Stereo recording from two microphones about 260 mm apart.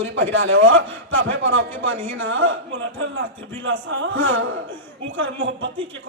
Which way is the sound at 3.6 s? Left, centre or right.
Right.